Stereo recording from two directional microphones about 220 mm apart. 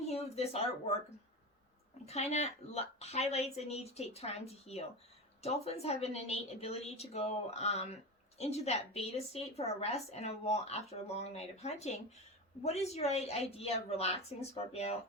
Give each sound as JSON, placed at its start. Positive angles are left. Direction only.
{"t": 0.1, "sound": "speech", "side_deg": 30}
{"t": 2.0, "sound": "a woman's voice", "side_deg": 30}